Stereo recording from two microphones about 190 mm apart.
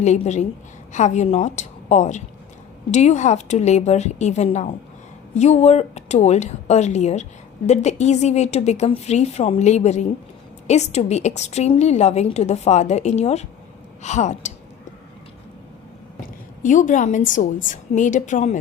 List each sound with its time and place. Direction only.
0.0 s a woman's voice: 40° left (ahead or behind)
16.2 s a woman's voice: 40° left (ahead or behind)